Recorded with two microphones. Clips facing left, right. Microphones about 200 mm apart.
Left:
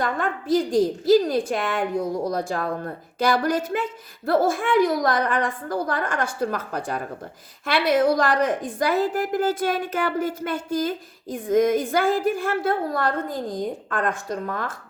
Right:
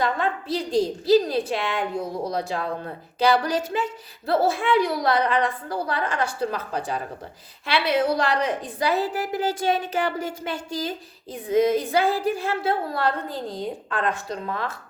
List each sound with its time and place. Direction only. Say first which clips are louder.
0.0 s a woman's voice: right 1 dB; 50° left (ahead or behind)